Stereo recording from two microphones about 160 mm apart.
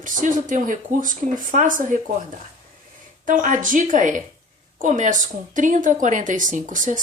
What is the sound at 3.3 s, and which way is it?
A woman's voice, 55° right (ahead or behind).